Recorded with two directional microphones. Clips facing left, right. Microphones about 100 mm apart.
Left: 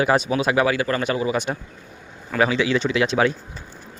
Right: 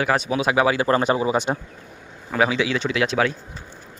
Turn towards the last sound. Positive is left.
turn(degrees=-5)  # may be behind; listen again after turning